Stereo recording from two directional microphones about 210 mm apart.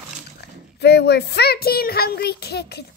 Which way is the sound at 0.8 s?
50° left (ahead or behind).